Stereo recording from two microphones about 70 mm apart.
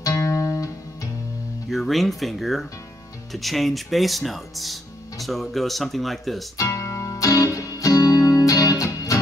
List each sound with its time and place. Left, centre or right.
0.1 s music: left
1.7 s speech: centre
6.7 s music: left